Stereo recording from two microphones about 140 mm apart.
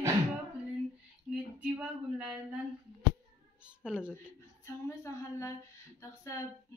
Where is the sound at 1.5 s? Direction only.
10° right (ahead or behind).